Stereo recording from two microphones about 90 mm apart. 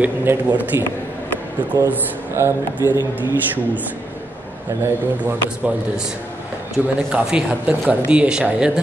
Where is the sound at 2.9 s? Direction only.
55° left (ahead or behind).